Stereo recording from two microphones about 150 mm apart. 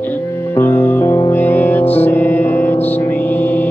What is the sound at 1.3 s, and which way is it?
Music, 15° left (ahead or behind).